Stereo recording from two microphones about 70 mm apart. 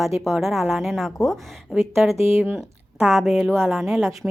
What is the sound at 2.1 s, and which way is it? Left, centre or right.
Speech, right.